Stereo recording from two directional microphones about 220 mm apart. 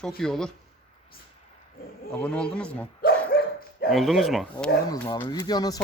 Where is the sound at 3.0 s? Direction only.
45° left (ahead or behind).